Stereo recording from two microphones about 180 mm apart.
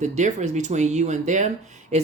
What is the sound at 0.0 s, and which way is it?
Speech, 40° right (ahead or behind).